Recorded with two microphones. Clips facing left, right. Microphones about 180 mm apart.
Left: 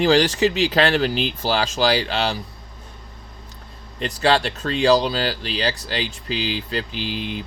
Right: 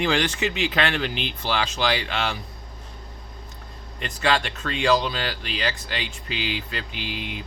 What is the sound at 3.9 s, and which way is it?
Speech, 35° left (ahead or behind).